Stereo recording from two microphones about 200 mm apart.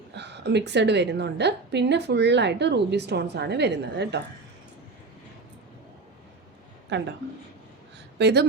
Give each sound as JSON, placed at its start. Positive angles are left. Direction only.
{"t": 0.1, "sound": "a woman's voice", "side_deg": -60}
{"t": 6.9, "sound": "a woman's voice", "side_deg": -60}
{"t": 8.2, "sound": "a woman's voice", "side_deg": -60}